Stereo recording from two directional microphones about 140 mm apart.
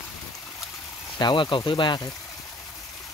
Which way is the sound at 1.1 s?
30° left (ahead or behind).